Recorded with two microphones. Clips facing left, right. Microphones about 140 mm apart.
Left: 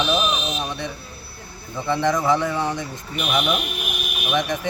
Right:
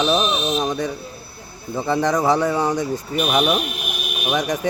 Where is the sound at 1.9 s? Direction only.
40° right (ahead or behind).